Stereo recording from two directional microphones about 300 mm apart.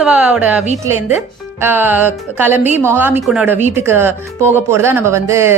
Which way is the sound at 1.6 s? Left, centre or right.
Centre.